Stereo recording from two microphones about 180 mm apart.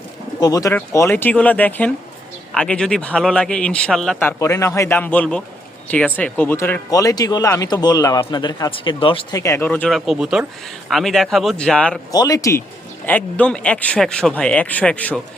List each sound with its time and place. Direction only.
0.3 s a man's voice: 20° left (ahead or behind)
12.1 s a man's voice: 20° left (ahead or behind)